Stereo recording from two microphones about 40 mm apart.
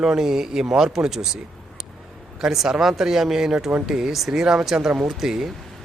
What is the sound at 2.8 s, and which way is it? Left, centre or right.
Speech, centre.